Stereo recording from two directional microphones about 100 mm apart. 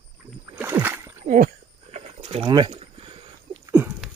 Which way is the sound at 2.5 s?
50° right (ahead or behind).